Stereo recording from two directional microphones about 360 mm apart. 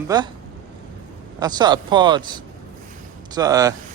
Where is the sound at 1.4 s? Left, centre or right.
Centre.